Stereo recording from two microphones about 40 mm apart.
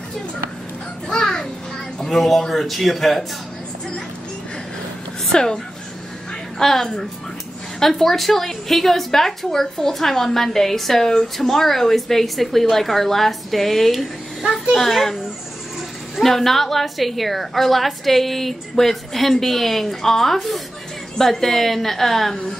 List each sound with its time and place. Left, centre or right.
1.0 s children playing: centre
2.0 s a woman's voice: centre
5.3 s a child's voice: centre
6.6 s a child's voice: centre
16.2 s a woman's voice: centre